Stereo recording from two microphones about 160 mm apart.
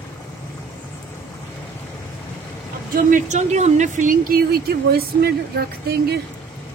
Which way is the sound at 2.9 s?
50° right (ahead or behind).